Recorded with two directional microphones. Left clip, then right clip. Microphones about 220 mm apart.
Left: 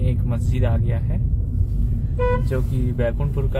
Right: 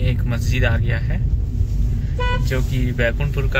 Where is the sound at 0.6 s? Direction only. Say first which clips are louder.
Right 5 dB; 25° right (ahead or behind).